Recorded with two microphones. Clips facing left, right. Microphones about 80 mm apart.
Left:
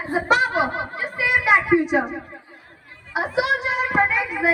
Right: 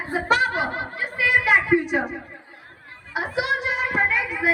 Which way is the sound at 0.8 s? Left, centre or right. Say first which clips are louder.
Even; centre.